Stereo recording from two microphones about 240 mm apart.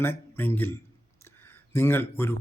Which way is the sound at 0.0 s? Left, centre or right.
Centre.